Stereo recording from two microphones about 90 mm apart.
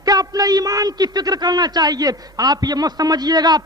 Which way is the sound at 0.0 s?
45° right (ahead or behind).